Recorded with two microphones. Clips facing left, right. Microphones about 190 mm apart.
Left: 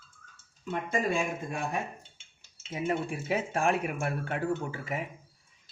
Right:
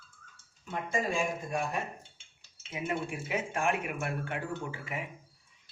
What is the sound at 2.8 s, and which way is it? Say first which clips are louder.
Speech: left 4 dB; 35° left (ahead or behind).